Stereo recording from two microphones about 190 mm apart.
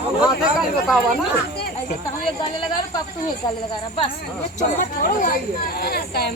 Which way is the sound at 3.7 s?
25° left (ahead or behind).